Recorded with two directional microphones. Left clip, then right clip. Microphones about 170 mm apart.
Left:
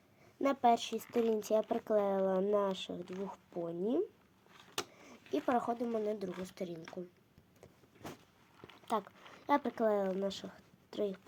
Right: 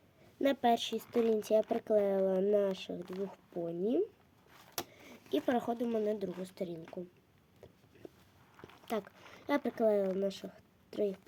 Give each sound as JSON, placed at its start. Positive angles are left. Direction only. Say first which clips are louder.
{"t": 0.4, "sound": "speech", "louder": "even", "side_deg": -25}
{"t": 4.9, "sound": "speech", "louder": "right 6 dB", "side_deg": -25}
{"t": 9.5, "sound": "speech", "louder": "right 1 dB", "side_deg": -20}